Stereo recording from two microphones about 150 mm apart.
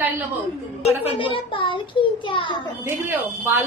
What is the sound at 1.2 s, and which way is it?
A child's voice, 35° left (ahead or behind).